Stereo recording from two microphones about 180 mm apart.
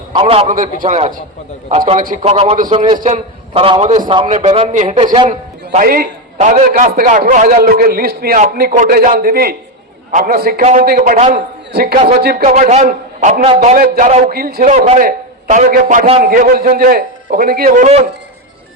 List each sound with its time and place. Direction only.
0.1 s a man's voice: 30° right (ahead or behind)
0.5 s a man's voice: 45° right (ahead or behind)
2.0 s a man's voice: 40° right (ahead or behind); by 3.0 s 25° right (ahead or behind)
3.0 s a man's voice: 35° right (ahead or behind)
5.3 s a sound: 40° right (ahead or behind)
5.9 s a man's voice: 50° right (ahead or behind)
10.1 s a man's voice: 45° right (ahead or behind)
10.8 s a man's voice: 55° right (ahead or behind)
11.7 s a man's voice: 60° right (ahead or behind)
12.4 s a man's voice: 35° right (ahead or behind); by 14.7 s 55° right (ahead or behind)
14.7 s a man's voice: 40° right (ahead or behind); by 17.8 s 55° right (ahead or behind)
17.8 s a man's voice: 35° right (ahead or behind)